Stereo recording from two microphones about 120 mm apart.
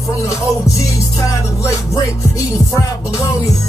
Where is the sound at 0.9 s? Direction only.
25° left (ahead or behind).